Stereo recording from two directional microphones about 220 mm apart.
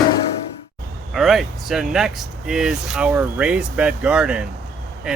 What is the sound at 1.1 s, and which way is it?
Speech, centre (ahead or behind).